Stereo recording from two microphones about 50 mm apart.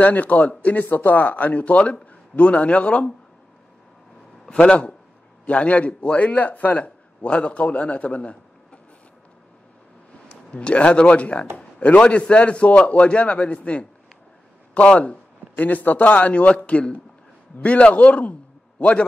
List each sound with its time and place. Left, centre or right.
0.0 s a man's voice: left
4.5 s a man's voice: left
10.3 s a man's voice: left
14.9 s a man's voice: left
15.5 s a man's voice: left